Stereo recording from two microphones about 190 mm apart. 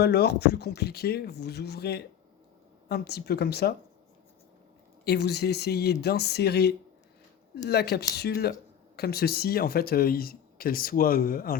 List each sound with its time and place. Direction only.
0.0 s speech: 60° left (ahead or behind)
5.0 s speech: 60° left (ahead or behind)